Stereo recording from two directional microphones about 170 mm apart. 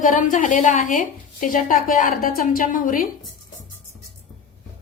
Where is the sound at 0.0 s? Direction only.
50° left (ahead or behind).